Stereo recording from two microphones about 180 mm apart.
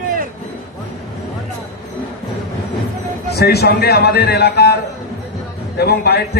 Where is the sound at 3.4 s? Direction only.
60° left (ahead or behind).